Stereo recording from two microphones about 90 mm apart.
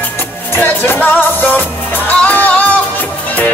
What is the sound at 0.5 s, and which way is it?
Music, 25° left (ahead or behind).